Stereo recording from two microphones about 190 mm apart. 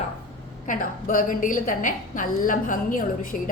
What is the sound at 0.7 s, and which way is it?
A woman's voice, 45° left (ahead or behind).